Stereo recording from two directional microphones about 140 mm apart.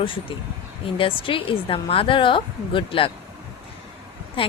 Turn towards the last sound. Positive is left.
turn(degrees=40)  # may be behind; listen again after turning